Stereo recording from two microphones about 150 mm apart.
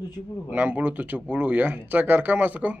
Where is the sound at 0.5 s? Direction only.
10° right (ahead or behind).